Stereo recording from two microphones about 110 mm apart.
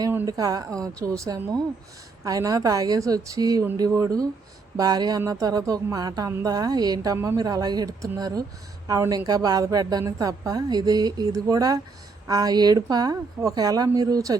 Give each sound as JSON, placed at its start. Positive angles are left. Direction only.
{"t": 0.3, "sound": "a woman's voice", "side_deg": -35}